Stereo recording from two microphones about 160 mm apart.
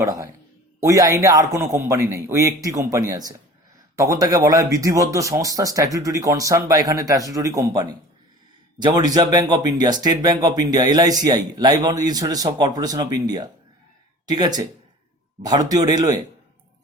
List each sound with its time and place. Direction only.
0.0 s speech: 20° right (ahead or behind)